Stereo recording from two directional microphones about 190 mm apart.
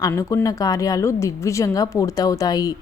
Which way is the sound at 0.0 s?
15° left (ahead or behind).